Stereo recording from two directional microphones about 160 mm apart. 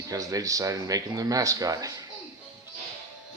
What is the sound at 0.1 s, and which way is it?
Speech, 20° right (ahead or behind).